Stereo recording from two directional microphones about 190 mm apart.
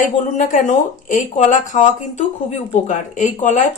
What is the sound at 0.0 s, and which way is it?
Speech, 40° left (ahead or behind).